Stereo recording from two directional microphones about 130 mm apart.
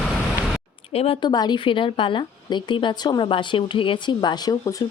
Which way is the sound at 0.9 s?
45° left (ahead or behind).